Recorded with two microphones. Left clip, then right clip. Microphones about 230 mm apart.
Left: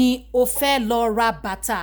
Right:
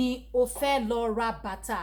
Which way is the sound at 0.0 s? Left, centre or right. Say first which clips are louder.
Left 7 dB; left.